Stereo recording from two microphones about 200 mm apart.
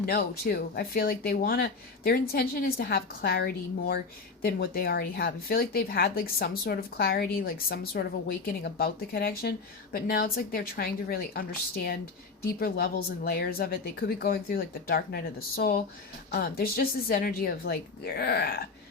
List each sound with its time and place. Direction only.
0.0 s speech: 50° left (ahead or behind)